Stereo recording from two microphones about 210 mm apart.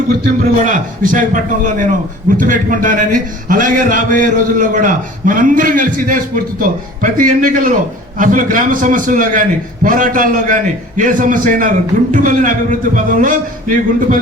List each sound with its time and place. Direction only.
0.1 s a man's voice: 40° right (ahead or behind)